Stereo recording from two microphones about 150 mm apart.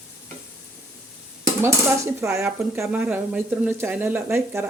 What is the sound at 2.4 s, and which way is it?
Speech, 10° right (ahead or behind).